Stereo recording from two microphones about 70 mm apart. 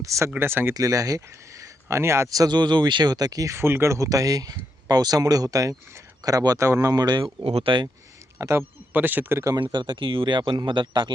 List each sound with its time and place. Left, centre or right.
0.0 s speech: right
0.3 s speech: right
0.7 s speech: right
2.3 s speech: right
3.5 s speech: right
6.6 s speech: right
8.4 s a man's voice: right
8.9 s speech: right
9.7 s speech: right